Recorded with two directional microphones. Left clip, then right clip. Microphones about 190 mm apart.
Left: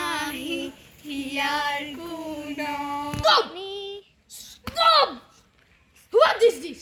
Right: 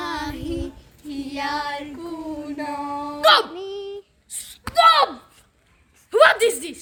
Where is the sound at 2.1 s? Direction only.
20° right (ahead or behind).